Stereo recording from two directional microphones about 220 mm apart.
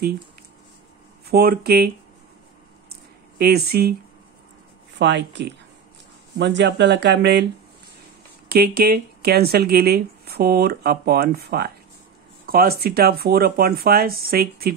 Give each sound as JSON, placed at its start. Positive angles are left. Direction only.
{"t": 1.2, "sound": "speech", "side_deg": -45}
{"t": 2.9, "sound": "a sound", "side_deg": -45}
{"t": 4.9, "sound": "speech", "side_deg": -55}
{"t": 8.5, "sound": "speech", "side_deg": -45}